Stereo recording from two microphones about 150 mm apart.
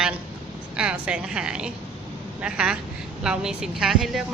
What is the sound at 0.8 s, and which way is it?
A woman's voice, 5° right (ahead or behind).